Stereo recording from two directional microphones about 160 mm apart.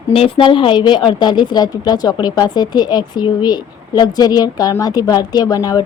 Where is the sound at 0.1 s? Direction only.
35° left (ahead or behind).